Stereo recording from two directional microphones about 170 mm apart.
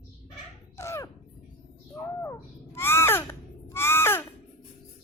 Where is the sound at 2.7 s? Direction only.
15° left (ahead or behind).